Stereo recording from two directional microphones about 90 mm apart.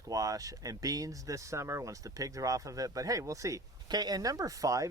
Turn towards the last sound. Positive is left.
turn(degrees=-40)  # may be behind; listen again after turning